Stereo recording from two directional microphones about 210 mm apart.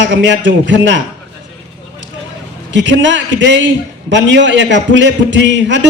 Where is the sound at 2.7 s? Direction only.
60° right (ahead or behind).